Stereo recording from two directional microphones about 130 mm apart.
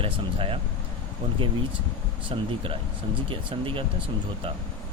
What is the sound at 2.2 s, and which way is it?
Speech, 40° right (ahead or behind).